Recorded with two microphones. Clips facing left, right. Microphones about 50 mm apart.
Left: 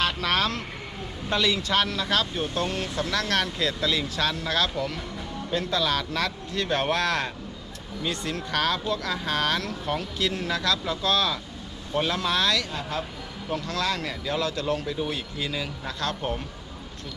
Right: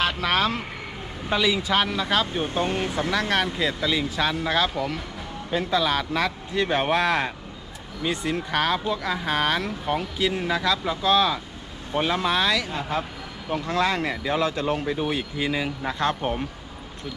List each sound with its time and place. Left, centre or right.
0.0 s speech: centre